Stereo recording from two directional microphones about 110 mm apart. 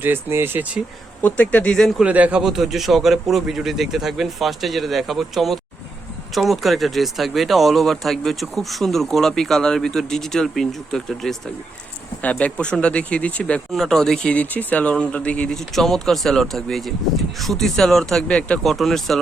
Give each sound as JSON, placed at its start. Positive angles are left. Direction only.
{"t": 0.0, "sound": "speech", "side_deg": -20}
{"t": 1.2, "sound": "speech", "side_deg": 15}
{"t": 2.0, "sound": "speech", "side_deg": -15}